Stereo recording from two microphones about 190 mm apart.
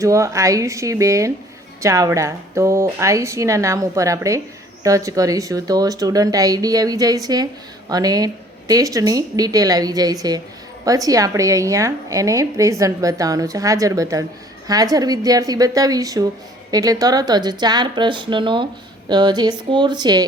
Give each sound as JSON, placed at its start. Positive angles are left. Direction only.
{"t": 0.0, "sound": "a woman's voice", "side_deg": -15}